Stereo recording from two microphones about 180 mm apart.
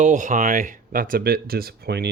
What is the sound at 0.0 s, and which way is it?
Speech, 40° right (ahead or behind).